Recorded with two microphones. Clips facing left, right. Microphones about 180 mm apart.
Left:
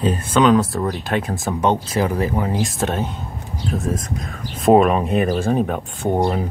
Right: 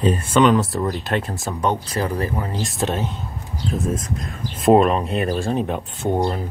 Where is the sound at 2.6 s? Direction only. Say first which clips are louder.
Left 2 dB; centre (ahead or behind).